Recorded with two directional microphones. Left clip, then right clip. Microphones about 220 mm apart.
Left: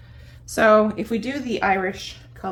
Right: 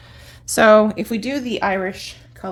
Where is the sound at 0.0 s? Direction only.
50° right (ahead or behind).